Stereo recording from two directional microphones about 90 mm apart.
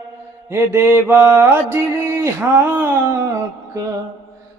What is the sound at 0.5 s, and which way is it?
Mantra, 25° right (ahead or behind).